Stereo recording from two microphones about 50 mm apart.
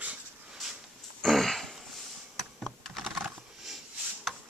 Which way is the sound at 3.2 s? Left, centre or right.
Centre.